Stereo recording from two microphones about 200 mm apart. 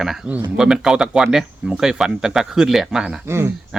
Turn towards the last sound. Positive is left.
turn(degrees=-10)  # may be behind; listen again after turning